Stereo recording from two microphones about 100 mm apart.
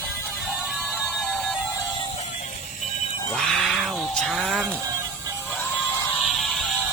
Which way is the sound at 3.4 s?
5° left (ahead or behind).